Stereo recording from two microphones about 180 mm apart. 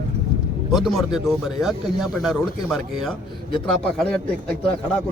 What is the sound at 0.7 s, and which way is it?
A man's voice, centre (ahead or behind).